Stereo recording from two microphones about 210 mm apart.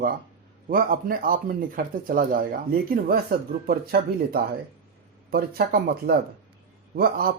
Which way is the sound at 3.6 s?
45° right (ahead or behind).